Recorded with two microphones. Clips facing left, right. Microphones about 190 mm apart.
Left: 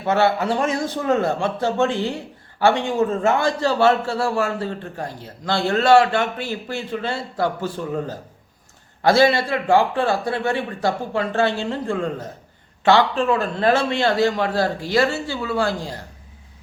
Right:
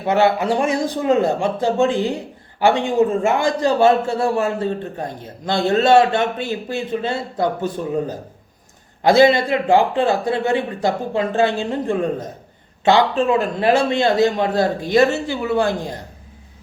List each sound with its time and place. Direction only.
0.0 s a man's voice: 15° right (ahead or behind)